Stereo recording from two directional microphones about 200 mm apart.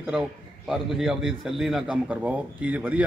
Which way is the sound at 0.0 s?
5° right (ahead or behind).